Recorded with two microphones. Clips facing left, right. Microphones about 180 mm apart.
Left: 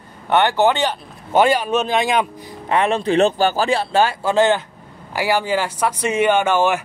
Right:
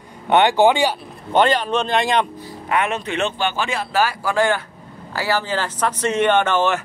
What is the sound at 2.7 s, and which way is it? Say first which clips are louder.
Speech: left 4 dB; 30° left (ahead or behind).